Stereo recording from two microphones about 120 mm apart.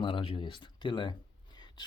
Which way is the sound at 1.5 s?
35° left (ahead or behind).